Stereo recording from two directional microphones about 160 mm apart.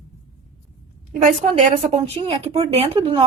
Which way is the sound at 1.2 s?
45° right (ahead or behind).